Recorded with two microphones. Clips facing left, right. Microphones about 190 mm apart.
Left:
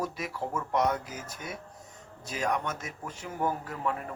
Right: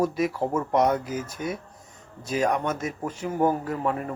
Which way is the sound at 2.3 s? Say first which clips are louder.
Right 7 dB; 45° right (ahead or behind).